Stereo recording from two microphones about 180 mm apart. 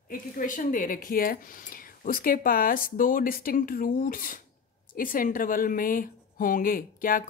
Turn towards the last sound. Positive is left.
turn(degrees=50)  # may be behind; listen again after turning